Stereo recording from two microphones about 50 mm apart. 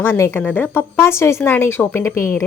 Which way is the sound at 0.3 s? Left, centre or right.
Left.